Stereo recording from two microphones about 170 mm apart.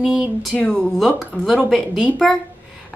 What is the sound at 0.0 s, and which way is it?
A woman's voice, 5° right (ahead or behind).